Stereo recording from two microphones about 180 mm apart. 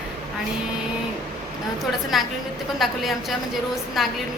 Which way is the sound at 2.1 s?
Centre (ahead or behind).